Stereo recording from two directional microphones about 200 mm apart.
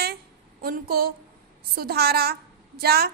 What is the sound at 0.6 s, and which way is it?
A woman's voice, 50° right (ahead or behind).